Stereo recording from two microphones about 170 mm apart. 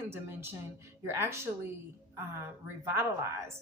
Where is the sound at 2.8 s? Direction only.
15° right (ahead or behind).